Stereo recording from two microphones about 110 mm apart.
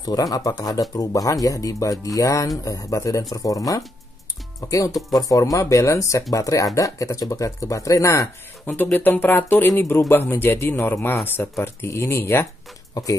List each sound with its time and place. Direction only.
0.0 s speech: 35° left (ahead or behind)
8.6 s speech: 15° left (ahead or behind)